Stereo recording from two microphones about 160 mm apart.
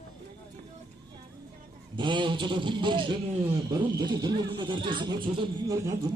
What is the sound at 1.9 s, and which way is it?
A man's voice, 30° right (ahead or behind).